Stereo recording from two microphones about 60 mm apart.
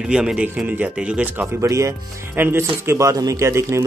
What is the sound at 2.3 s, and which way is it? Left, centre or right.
Speech, right.